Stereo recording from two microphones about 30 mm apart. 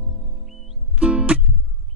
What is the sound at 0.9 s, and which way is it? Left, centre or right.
Music, right.